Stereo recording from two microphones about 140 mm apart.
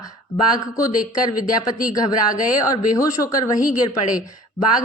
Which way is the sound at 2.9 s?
25° left (ahead or behind).